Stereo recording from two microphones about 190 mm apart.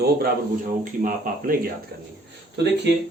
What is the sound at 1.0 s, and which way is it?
Speech, 45° right (ahead or behind).